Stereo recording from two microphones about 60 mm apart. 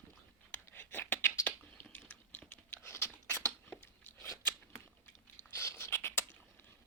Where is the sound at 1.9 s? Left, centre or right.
Left.